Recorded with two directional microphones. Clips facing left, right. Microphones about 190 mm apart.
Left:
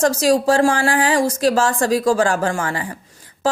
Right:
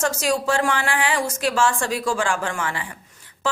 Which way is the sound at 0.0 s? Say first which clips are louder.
Left 7 dB; 35° left (ahead or behind).